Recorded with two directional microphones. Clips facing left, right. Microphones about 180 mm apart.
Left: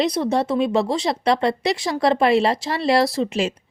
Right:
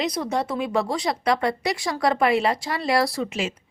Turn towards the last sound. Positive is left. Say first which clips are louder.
# left 5 dB
turn(degrees=35)  # may be behind; listen again after turning